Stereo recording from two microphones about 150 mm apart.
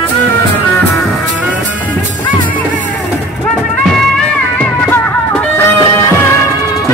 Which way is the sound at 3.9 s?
5° left (ahead or behind).